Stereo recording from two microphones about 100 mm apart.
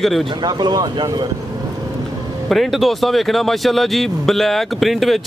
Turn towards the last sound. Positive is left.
turn(degrees=0)  # may be behind; listen again after turning